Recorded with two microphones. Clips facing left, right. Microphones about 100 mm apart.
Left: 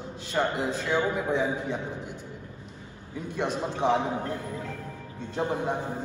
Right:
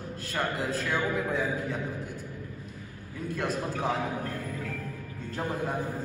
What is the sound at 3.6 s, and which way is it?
Speech, 25° left (ahead or behind).